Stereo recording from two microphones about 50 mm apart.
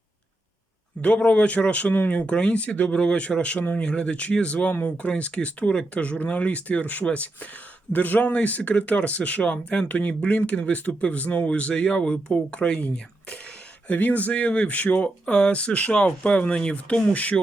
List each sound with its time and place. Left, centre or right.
1.0 s speech: left
13.8 s speech: left
15.3 s speech: left